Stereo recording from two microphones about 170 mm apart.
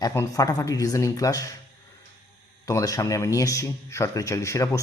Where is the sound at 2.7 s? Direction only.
20° left (ahead or behind).